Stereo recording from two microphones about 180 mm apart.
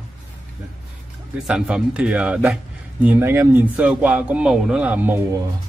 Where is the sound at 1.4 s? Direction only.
5° right (ahead or behind).